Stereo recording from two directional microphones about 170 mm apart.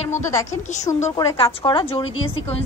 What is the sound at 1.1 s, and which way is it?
A woman's voice, 30° left (ahead or behind).